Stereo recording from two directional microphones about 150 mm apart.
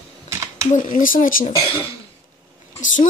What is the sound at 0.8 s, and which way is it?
Speech, 65° left (ahead or behind).